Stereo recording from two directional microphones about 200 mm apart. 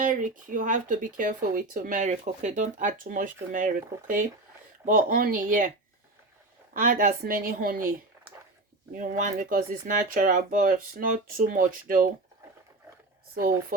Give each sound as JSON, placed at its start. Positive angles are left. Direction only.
{"t": 0.0, "sound": "speech", "side_deg": -40}
{"t": 6.7, "sound": "speech", "side_deg": -45}